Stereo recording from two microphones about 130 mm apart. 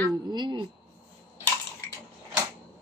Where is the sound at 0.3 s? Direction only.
35° right (ahead or behind).